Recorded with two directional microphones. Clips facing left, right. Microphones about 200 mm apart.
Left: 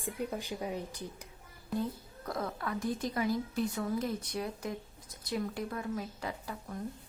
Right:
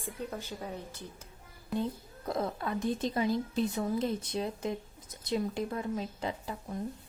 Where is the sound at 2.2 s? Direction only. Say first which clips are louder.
Right 3 dB; 25° right (ahead or behind).